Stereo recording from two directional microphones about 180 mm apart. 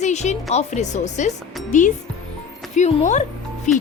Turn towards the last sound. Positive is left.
turn(degrees=45)  # may be behind; listen again after turning